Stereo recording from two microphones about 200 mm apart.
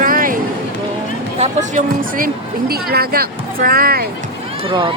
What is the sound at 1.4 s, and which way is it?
Speech, 35° right (ahead or behind).